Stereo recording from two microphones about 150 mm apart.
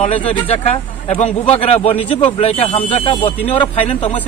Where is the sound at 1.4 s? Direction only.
40° left (ahead or behind).